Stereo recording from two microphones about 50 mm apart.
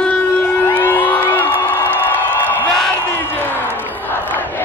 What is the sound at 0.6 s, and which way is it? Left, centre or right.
Music, left.